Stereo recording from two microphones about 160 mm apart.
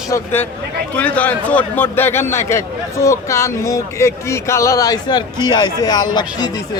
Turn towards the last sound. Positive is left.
turn(degrees=25)  # may be behind; listen again after turning